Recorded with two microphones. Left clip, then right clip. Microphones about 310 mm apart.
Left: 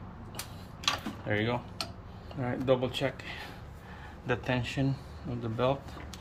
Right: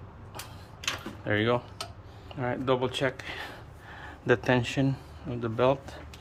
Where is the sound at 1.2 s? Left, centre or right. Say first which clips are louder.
Right 6 dB; centre.